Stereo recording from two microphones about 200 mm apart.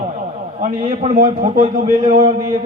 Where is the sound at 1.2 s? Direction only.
30° right (ahead or behind).